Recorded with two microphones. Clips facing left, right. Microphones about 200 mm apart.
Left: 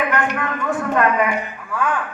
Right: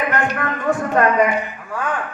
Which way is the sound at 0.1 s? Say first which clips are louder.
Even; 40° right (ahead or behind).